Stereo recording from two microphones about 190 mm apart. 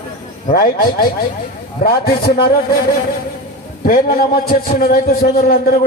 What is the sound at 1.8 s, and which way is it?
Speech, 55° left (ahead or behind).